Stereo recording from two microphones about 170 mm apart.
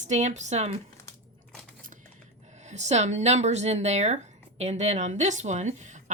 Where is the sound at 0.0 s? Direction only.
45° right (ahead or behind).